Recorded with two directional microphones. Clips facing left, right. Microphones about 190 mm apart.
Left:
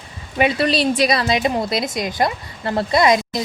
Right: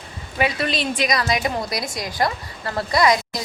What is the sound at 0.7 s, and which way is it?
A woman's voice, 35° left (ahead or behind).